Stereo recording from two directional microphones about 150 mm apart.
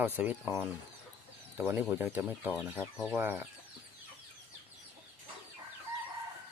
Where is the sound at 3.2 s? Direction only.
10° right (ahead or behind).